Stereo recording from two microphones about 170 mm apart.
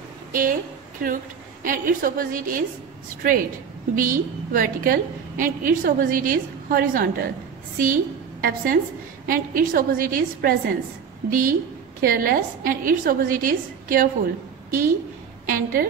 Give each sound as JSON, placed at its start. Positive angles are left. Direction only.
{"t": 0.3, "sound": "a woman's voice", "side_deg": -55}